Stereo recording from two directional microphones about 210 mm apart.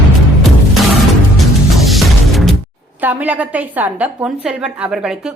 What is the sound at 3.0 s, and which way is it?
A woman's voice, 10° right (ahead or behind).